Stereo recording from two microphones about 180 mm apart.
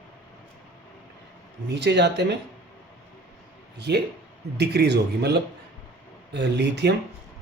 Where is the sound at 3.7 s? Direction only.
65° right (ahead or behind).